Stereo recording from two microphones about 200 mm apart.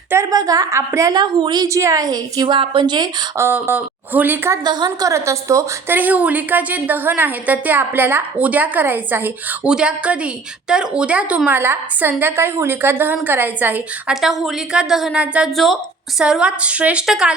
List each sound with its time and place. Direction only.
0.1 s a woman's voice: 15° right (ahead or behind)